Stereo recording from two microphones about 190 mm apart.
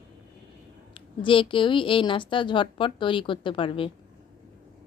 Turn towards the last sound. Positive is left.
turn(degrees=25)  # may be behind; listen again after turning